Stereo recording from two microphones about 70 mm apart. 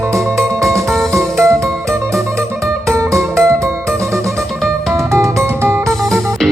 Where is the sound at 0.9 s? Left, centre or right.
Centre.